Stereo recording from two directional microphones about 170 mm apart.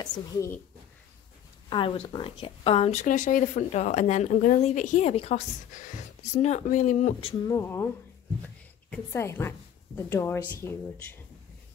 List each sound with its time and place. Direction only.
0.0 s a woman's voice: 20° left (ahead or behind)
1.7 s speech: 30° left (ahead or behind); by 7.2 s 45° left (ahead or behind)
7.4 s a woman's voice: 15° left (ahead or behind)
8.9 s a woman's voice: 15° left (ahead or behind)